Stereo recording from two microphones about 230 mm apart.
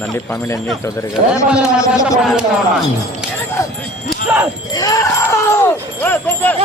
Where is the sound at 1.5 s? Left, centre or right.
Centre.